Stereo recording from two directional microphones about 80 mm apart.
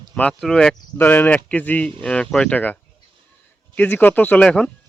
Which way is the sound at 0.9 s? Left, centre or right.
Left.